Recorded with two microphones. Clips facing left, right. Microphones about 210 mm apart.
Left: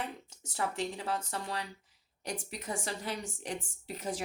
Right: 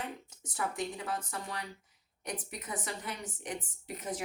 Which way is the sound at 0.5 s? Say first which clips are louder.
Left 1 dB; 30° left (ahead or behind).